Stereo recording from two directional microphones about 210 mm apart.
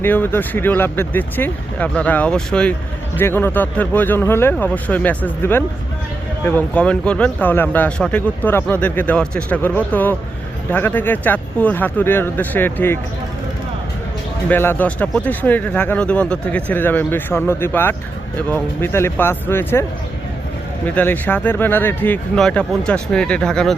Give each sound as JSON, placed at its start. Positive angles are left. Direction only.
{"t": 0.0, "sound": "speech", "side_deg": 10}
{"t": 14.5, "sound": "speech", "side_deg": 10}
{"t": 20.8, "sound": "speech", "side_deg": 10}